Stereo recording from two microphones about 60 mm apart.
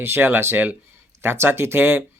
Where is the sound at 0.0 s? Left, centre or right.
Right.